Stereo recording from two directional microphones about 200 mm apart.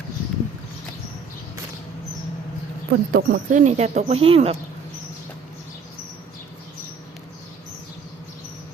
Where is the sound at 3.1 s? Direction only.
50° right (ahead or behind); by 4.5 s 30° right (ahead or behind).